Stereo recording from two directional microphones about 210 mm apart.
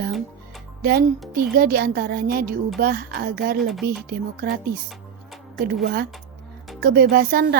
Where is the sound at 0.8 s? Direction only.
45° right (ahead or behind).